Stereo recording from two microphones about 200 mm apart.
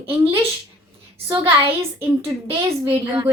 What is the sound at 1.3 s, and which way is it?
A woman's voice, 10° right (ahead or behind).